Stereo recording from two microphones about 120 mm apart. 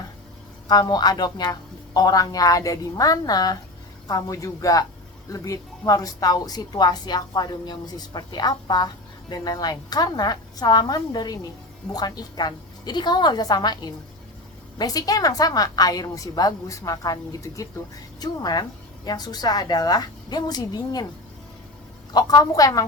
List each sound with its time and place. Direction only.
0.7 s a woman's voice: 35° left (ahead or behind)
22.1 s speech: 30° left (ahead or behind)